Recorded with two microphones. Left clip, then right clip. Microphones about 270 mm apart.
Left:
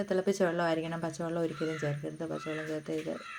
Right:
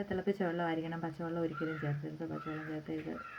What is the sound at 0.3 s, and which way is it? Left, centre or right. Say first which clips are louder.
Speech: left 4 dB; left.